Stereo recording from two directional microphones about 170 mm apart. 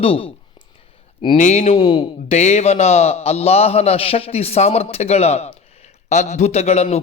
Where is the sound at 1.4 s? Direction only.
40° left (ahead or behind).